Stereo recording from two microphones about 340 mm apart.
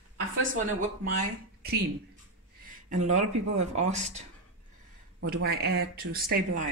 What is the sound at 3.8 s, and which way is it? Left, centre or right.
Speech, centre.